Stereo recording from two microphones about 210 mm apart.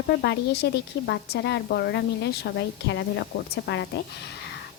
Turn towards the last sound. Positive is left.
turn(degrees=55)  # may be behind; listen again after turning